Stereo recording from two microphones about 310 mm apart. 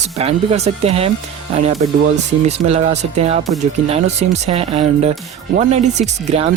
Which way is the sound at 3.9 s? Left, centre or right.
Right.